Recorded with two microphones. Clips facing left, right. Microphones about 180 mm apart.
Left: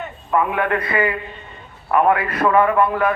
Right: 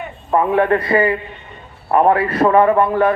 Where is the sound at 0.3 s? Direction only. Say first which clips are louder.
Right 5 dB; 35° right (ahead or behind).